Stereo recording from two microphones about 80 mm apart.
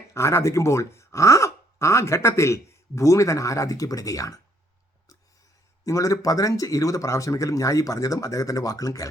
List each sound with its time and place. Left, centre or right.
0.1 s speech: left
5.8 s speech: left